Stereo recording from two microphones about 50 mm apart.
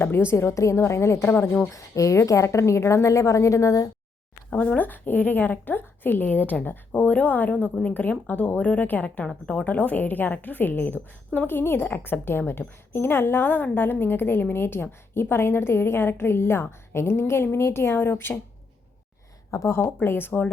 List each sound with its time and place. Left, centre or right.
0.0 s a woman's voice: left
1.7 s a woman's voice: left
4.5 s speech: left
4.8 s a woman's voice: left
19.5 s speech: left
20.1 s a woman's voice: left